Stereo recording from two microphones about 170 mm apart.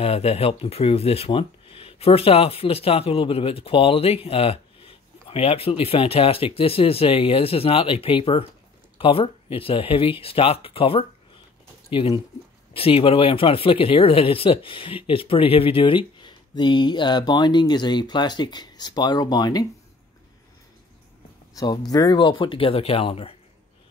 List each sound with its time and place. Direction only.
0.0 s speech: 35° left (ahead or behind)
21.5 s speech: 20° left (ahead or behind)